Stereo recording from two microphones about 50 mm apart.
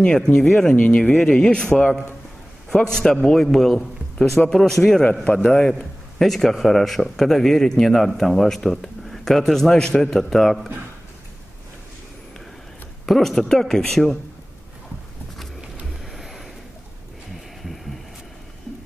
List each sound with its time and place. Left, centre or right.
0.0 s a man's voice: left
5.2 s a man's voice: centre
5.6 s a man's voice: centre
13.0 s a man's voice: centre
16.2 s a sound: centre